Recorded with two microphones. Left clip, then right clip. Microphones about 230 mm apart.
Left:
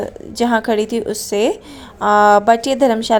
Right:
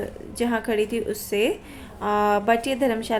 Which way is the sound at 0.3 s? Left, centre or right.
Left.